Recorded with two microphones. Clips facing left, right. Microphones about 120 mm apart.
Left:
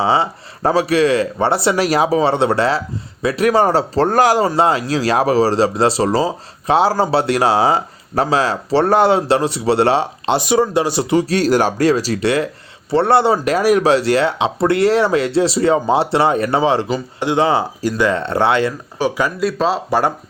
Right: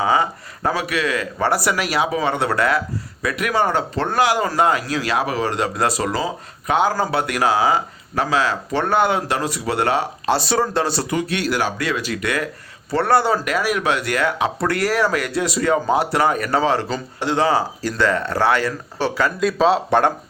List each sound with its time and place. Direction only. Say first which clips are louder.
0.0 s speech: left 2 dB; 30° left (ahead or behind)
4.4 s speech: left 3 dB; 30° left (ahead or behind)
11.2 s speech: left 7 dB; 40° left (ahead or behind); by 19.3 s 15° left (ahead or behind)
19.4 s speech: right 3 dB; centre (ahead or behind)